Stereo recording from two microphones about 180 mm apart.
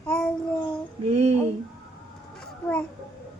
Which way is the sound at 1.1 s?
35° right (ahead or behind).